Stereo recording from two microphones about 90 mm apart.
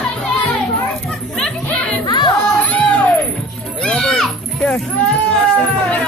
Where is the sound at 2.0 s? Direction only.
50° left (ahead or behind).